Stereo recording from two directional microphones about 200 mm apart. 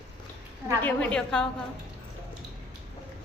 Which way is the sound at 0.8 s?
5° left (ahead or behind).